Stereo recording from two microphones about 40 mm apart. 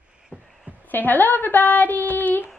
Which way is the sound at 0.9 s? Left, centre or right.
Left.